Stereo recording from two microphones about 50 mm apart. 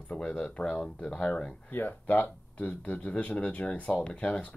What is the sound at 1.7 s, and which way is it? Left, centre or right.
Speech, left.